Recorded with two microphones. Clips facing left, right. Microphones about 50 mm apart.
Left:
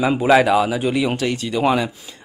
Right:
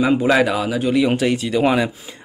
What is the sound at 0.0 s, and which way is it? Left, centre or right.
Speech, centre.